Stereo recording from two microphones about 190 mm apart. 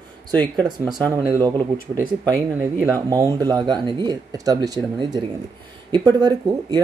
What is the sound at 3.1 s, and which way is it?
Speech, 20° right (ahead or behind).